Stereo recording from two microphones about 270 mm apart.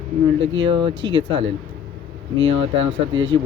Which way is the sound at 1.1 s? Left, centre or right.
Centre.